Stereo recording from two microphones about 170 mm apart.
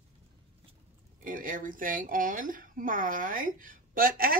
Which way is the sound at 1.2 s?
55° right (ahead or behind).